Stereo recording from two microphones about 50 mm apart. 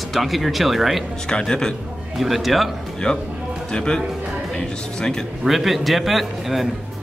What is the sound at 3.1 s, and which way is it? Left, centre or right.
Speech, left.